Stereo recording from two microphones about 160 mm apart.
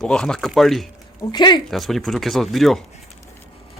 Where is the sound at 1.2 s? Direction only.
25° left (ahead or behind).